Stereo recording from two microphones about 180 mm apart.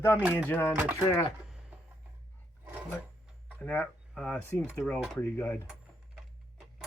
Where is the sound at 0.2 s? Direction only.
5° right (ahead or behind).